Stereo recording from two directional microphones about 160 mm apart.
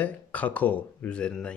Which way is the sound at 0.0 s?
10° left (ahead or behind).